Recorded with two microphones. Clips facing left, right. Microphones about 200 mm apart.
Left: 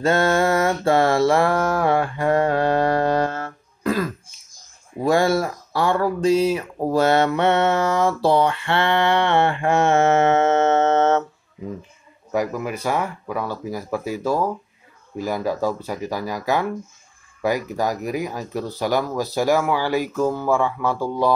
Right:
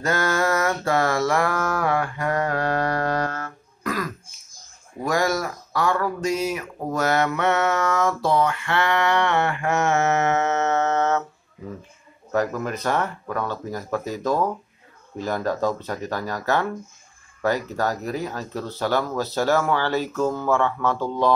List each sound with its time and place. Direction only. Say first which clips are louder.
0.0 s mantra: left 5 dB; 25° left (ahead or behind)
5.0 s speech: left 5 dB; 30° left (ahead or behind)
12.3 s speech: even; 10° left (ahead or behind)